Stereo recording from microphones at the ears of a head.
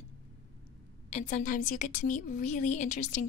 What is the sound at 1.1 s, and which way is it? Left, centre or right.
A woman's voice, left.